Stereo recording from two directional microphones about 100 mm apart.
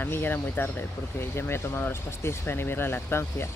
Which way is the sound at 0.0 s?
20° left (ahead or behind).